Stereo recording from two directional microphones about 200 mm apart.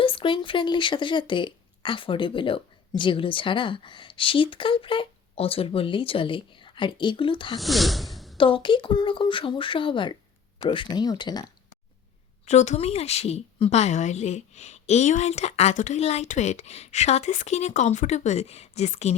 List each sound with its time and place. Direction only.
0.0 s speech: 25° left (ahead or behind)
7.6 s gasp: centre (ahead or behind)
8.4 s speech: 25° left (ahead or behind)
12.5 s a woman's voice: 35° left (ahead or behind)